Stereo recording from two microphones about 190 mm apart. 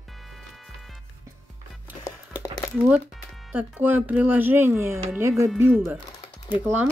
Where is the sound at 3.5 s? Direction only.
10° right (ahead or behind).